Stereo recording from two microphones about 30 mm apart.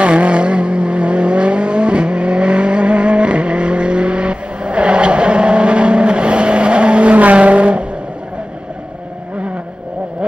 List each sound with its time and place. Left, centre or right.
0.0 s vehicle: right